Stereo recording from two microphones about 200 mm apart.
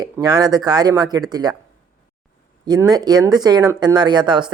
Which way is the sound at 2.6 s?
20° right (ahead or behind).